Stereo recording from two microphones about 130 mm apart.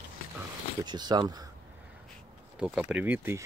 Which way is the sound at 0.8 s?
35° right (ahead or behind).